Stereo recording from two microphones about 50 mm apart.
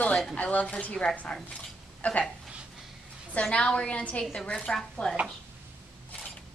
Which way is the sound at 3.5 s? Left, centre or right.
Left.